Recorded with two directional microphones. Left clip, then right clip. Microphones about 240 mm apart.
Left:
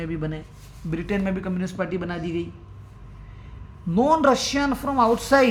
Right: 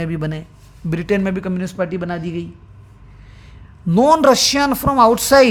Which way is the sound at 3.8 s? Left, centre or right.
Right.